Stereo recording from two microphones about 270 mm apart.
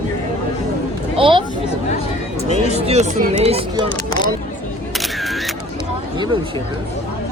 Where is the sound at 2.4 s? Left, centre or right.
Right.